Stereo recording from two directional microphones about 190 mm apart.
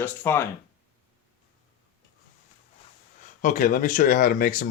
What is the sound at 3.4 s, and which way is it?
Speech, 45° left (ahead or behind).